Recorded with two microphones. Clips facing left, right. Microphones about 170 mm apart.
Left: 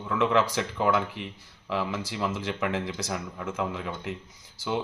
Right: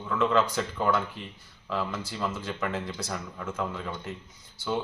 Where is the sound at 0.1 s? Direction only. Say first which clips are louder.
Left 1 dB; 10° left (ahead or behind).